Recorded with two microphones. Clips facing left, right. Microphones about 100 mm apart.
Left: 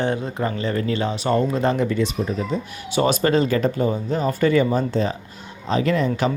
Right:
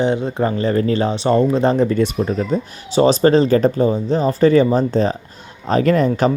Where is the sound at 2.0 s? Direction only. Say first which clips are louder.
Right 5 dB; 55° right (ahead or behind).